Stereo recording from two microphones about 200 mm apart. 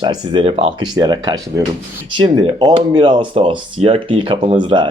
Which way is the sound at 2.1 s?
25° right (ahead or behind).